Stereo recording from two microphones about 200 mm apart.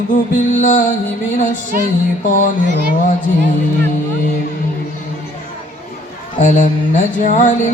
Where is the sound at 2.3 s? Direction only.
40° left (ahead or behind).